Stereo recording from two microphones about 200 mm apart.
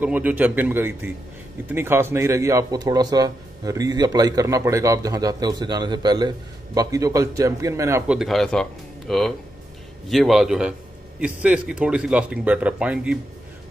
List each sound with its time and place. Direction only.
0.0 s speech: 5° right (ahead or behind)
8.1 s speech: centre (ahead or behind)